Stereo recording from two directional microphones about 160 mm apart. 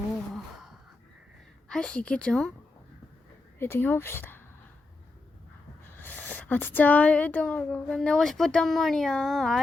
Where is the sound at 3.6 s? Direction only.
15° left (ahead or behind).